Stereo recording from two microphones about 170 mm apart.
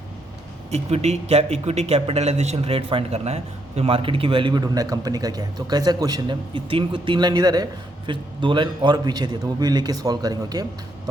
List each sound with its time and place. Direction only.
0.7 s speech: 40° right (ahead or behind); by 11.1 s 20° right (ahead or behind)